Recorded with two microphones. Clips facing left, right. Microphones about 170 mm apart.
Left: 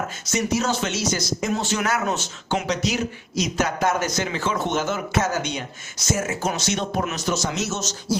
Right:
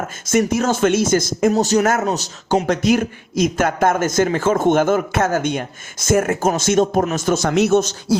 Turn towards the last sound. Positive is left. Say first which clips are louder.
# right 12 dB
turn(degrees=-55)  # may be behind; listen again after turning